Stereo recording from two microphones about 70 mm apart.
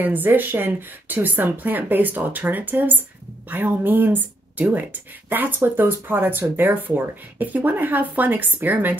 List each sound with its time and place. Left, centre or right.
0.0 s speech: right